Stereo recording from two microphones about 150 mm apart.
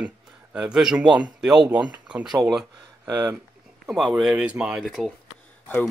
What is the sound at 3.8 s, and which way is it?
Speech, centre (ahead or behind).